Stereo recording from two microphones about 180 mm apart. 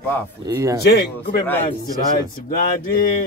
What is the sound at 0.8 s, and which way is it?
Speech, 65° left (ahead or behind).